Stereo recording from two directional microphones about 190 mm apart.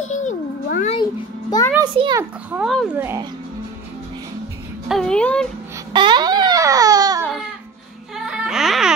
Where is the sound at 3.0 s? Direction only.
15° right (ahead or behind).